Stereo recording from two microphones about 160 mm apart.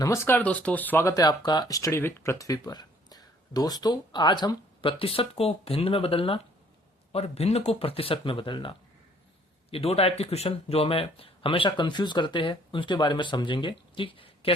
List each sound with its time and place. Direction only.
0.0 s speech: 15° left (ahead or behind)
9.7 s speech: 35° left (ahead or behind)